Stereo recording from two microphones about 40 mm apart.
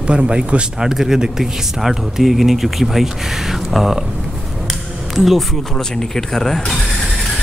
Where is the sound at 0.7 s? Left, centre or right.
Centre.